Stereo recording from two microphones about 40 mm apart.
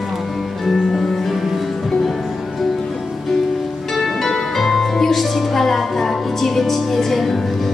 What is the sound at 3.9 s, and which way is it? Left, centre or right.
Music, centre.